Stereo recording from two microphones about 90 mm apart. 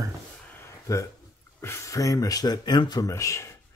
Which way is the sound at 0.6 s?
35° left (ahead or behind).